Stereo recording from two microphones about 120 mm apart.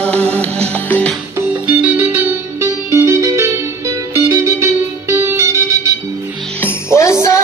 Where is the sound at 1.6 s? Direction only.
15° right (ahead or behind).